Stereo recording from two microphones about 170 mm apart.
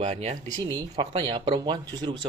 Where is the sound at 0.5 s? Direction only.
25° right (ahead or behind).